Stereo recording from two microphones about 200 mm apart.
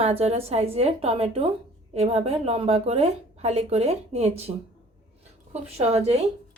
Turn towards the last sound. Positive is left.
turn(degrees=-30)  # may be behind; listen again after turning